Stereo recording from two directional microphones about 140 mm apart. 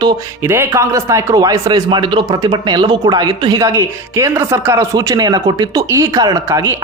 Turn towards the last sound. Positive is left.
turn(degrees=-25)  # may be behind; listen again after turning